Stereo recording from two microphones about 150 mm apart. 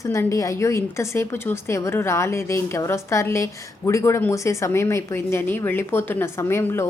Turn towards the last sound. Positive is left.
turn(degrees=15)  # may be behind; listen again after turning